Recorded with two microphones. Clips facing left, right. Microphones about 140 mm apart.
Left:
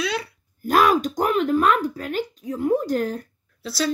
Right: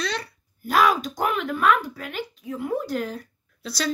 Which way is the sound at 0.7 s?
45° left (ahead or behind).